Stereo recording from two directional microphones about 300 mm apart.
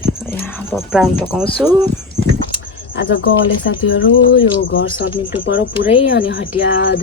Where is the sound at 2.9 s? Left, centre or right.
Left.